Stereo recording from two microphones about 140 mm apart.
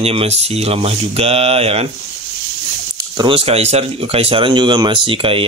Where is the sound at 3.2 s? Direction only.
40° right (ahead or behind).